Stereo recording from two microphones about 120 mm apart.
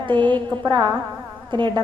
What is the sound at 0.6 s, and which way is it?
Music, 40° right (ahead or behind).